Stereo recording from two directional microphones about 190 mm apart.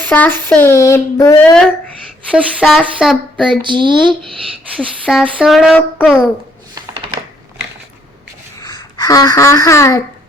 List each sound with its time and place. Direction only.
0.0 s speech: 10° left (ahead or behind)
2.3 s speech: 5° right (ahead or behind)
3.6 s speech: 25° right (ahead or behind)
5.0 s speech: centre (ahead or behind)
6.7 s a sound: 25° right (ahead or behind)
8.6 s speech: 20° left (ahead or behind)